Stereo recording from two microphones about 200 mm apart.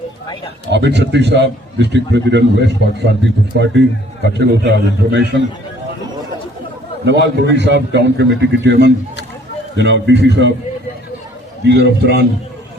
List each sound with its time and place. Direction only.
0.7 s a man's voice: 60° right (ahead or behind)
4.2 s a man's voice: 60° right (ahead or behind)
7.0 s a man's voice: 60° right (ahead or behind)
11.6 s a man's voice: 60° right (ahead or behind)